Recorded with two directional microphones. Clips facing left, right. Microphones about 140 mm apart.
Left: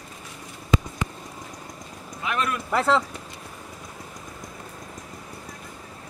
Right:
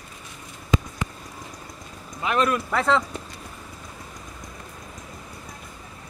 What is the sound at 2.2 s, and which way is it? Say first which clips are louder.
Speech: right 5 dB; 30° right (ahead or behind).